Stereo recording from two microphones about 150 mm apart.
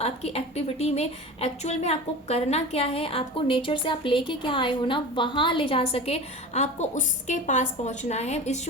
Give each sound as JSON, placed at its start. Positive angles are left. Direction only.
{"t": 0.0, "sound": "a woman's voice", "side_deg": 45}